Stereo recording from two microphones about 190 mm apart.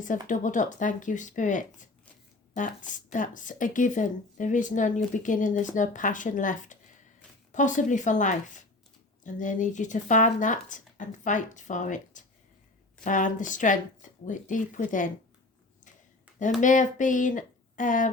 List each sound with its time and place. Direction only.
0.0 s speech: 45° left (ahead or behind)
16.6 s speech: 40° left (ahead or behind)